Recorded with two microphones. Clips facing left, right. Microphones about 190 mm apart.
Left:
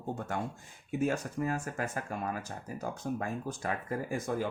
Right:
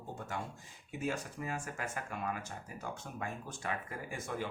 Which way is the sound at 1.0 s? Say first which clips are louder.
Left 7 dB; 45° left (ahead or behind).